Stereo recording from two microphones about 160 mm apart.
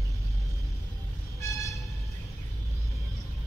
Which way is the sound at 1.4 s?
20° left (ahead or behind).